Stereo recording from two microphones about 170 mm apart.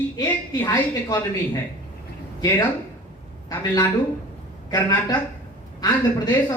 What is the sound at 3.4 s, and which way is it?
A man's voice, 20° left (ahead or behind).